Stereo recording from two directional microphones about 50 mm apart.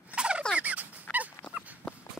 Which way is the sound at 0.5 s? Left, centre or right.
Right.